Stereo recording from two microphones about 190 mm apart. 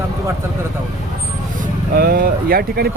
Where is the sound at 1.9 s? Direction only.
50° right (ahead or behind).